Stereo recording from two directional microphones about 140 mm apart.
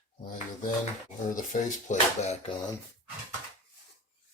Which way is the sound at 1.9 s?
50° left (ahead or behind).